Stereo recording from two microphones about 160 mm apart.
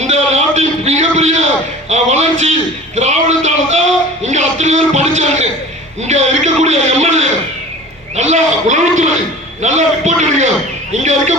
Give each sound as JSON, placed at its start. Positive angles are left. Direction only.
{"t": 0.0, "sound": "a sound", "side_deg": -45}
{"t": 4.2, "sound": "music", "side_deg": -45}
{"t": 6.0, "sound": "a man's voice", "side_deg": -45}